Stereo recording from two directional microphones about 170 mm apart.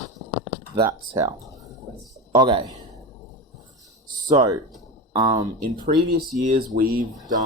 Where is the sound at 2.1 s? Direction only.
25° right (ahead or behind).